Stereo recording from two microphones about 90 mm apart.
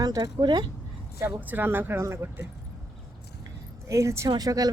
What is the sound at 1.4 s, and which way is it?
Speech, 20° right (ahead or behind).